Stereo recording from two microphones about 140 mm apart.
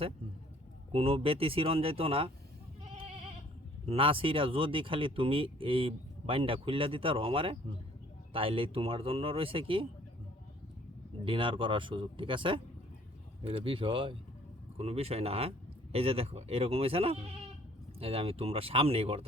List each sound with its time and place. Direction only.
0.9 s speech: 45° right (ahead or behind)
3.8 s speech: 40° right (ahead or behind)
11.3 s speech: 35° right (ahead or behind)